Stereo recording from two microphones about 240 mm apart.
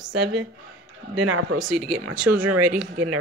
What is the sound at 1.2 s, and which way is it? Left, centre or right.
Speech, right.